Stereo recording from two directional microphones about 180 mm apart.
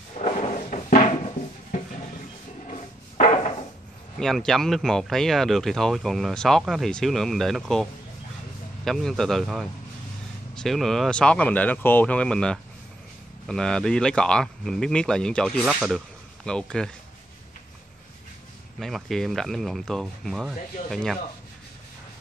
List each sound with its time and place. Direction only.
0.2 s cupboard open or close: 40° left (ahead or behind)
2.7 s a sound: 35° left (ahead or behind)
4.2 s speech: 5° left (ahead or behind)
18.8 s speech: centre (ahead or behind)